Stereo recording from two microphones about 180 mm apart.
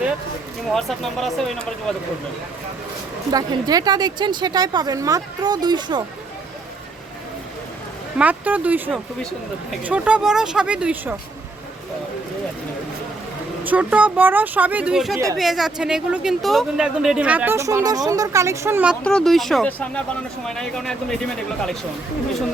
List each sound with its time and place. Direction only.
0.7 s speech: centre (ahead or behind)
3.3 s a woman's voice: 20° right (ahead or behind)
8.2 s speech: 10° right (ahead or behind)
9.8 s speech: 5° right (ahead or behind)
13.7 s speech: 10° right (ahead or behind)
19.0 s speech: 5° left (ahead or behind)